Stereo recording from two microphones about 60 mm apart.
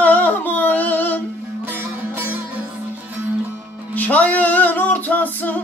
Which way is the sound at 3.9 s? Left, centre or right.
Left.